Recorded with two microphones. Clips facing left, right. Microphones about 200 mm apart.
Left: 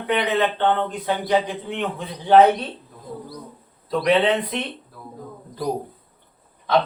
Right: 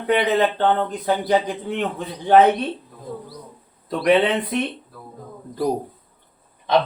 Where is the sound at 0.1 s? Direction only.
35° right (ahead or behind).